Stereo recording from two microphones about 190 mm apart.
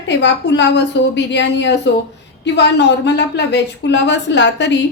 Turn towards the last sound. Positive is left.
turn(degrees=70)  # may be behind; listen again after turning